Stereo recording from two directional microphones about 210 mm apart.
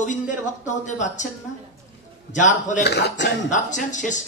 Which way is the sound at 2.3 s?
35° left (ahead or behind).